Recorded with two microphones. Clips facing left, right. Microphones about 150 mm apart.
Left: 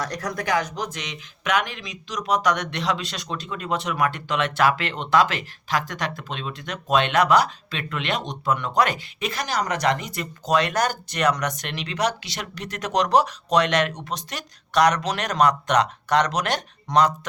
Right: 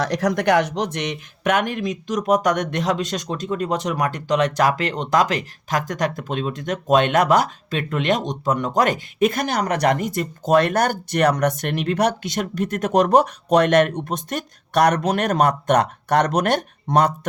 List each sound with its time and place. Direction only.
0.0 s speech: 90° right; by 17.1 s 55° right (ahead or behind)